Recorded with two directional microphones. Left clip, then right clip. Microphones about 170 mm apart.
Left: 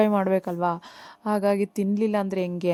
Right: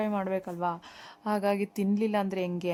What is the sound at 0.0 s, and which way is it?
A woman's voice, 40° left (ahead or behind).